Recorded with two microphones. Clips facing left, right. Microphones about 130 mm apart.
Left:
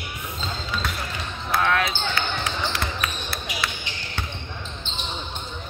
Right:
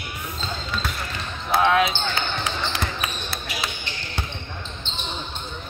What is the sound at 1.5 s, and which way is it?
Basketball bounce, 20° right (ahead or behind).